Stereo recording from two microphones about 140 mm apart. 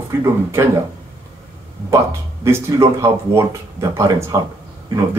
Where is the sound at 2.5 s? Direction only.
20° right (ahead or behind).